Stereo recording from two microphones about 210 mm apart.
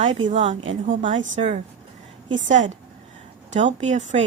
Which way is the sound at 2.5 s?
35° right (ahead or behind).